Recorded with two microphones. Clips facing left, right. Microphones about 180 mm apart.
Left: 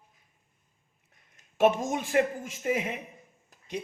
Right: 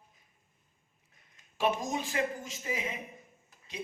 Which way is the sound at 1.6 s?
55° left (ahead or behind).